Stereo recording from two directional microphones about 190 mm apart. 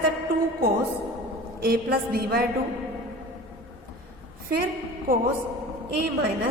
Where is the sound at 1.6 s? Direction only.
50° right (ahead or behind).